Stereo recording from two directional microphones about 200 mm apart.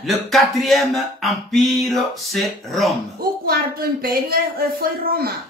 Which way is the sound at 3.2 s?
50° right (ahead or behind).